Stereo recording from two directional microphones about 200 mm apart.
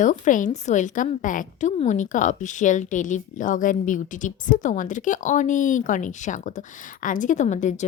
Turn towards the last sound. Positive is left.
turn(degrees=35)  # may be behind; listen again after turning